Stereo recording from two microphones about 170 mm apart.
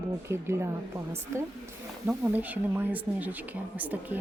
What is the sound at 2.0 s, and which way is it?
A woman's voice, 10° right (ahead or behind).